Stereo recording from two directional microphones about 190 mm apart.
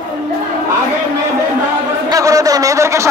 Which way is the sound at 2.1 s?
20° right (ahead or behind).